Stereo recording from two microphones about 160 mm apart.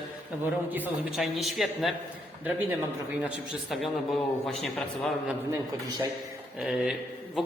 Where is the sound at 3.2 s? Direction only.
5° right (ahead or behind).